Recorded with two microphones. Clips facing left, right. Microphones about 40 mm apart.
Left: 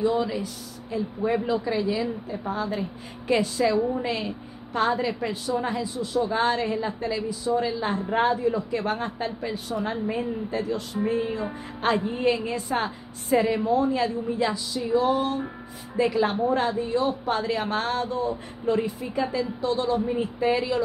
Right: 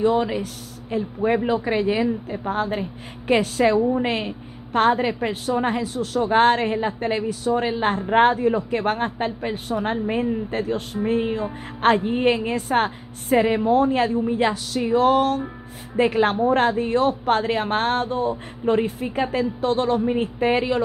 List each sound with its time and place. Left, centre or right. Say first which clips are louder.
0.0 s a woman's voice: right 4 dB; right
16.0 s a woman's voice: right 4 dB; right